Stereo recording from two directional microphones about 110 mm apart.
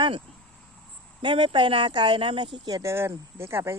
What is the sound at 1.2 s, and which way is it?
Speech, 50° right (ahead or behind).